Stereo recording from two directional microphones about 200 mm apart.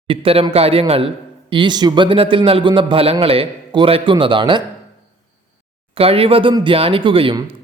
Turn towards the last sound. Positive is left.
turn(degrees=-25)  # may be behind; listen again after turning